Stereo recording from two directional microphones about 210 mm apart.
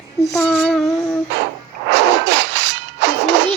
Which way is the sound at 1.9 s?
60° right (ahead or behind).